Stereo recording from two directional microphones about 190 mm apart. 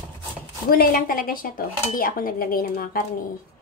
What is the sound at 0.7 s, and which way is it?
A woman's voice, 50° left (ahead or behind).